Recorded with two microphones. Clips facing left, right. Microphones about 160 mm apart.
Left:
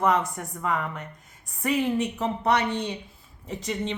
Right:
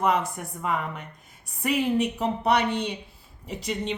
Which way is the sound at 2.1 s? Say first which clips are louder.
Right 1 dB; 10° right (ahead or behind).